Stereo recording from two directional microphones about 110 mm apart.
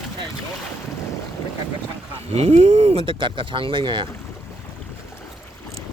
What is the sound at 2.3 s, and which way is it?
Speech, 70° right (ahead or behind).